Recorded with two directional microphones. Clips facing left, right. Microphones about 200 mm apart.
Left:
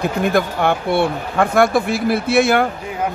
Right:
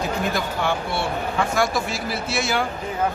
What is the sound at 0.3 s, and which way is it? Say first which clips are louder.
Speech: left 7 dB; 55° left (ahead or behind).